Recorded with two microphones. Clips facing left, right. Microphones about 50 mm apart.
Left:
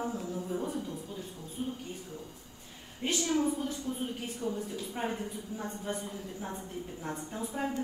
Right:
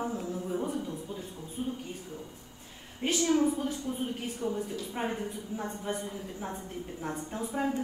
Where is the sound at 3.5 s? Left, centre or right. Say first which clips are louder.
Right 2 dB; centre.